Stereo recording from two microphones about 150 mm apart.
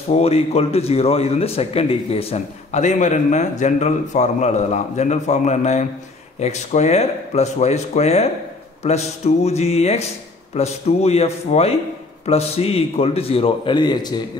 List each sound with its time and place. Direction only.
0.1 s a man's voice: 45° left (ahead or behind)